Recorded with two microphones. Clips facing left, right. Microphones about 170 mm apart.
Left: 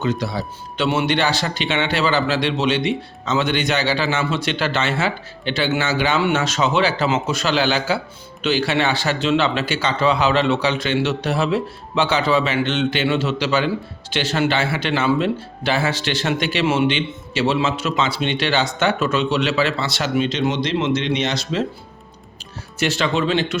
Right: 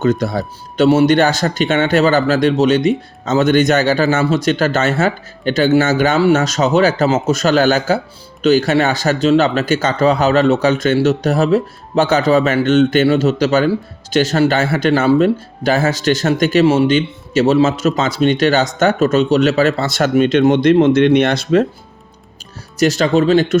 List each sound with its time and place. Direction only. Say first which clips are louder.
0.0 s speech: right 7 dB; 45° right (ahead or behind)
22.8 s speech: right 7 dB; 40° right (ahead or behind)